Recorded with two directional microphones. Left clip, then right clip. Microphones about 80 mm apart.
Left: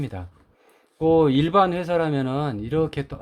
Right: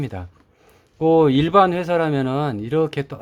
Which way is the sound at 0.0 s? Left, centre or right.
Right.